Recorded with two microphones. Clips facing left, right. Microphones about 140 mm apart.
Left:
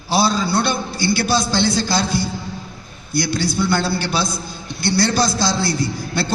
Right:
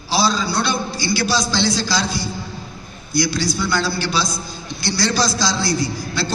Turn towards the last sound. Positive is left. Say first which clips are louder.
# left 1 dB
turn(degrees=55)  # may be behind; listen again after turning